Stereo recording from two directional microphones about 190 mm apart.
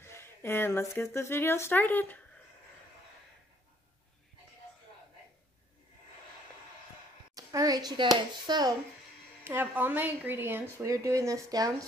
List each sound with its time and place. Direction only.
0.0 s speech: 10° left (ahead or behind)
7.3 s a child's voice: 20° right (ahead or behind)
9.4 s speech: 10° right (ahead or behind)